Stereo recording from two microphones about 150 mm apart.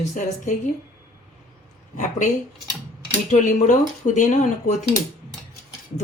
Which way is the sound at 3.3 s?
55° left (ahead or behind).